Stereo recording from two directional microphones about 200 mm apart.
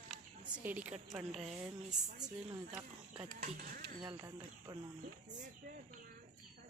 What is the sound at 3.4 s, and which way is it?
Speech, 45° right (ahead or behind).